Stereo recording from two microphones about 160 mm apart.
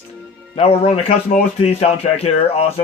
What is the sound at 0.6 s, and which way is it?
A man's voice, 40° left (ahead or behind).